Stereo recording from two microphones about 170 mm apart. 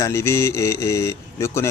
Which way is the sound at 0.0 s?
15° left (ahead or behind).